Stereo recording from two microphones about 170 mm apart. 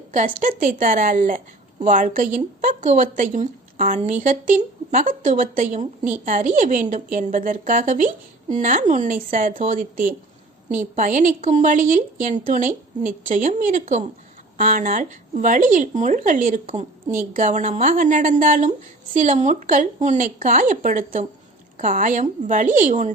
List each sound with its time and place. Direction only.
0.1 s a woman's voice: 50° right (ahead or behind)